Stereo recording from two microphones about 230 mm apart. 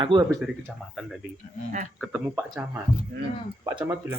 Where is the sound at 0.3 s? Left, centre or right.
Centre.